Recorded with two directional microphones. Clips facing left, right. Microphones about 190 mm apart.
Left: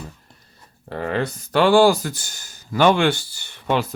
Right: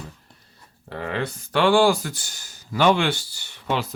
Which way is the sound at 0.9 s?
40° left (ahead or behind).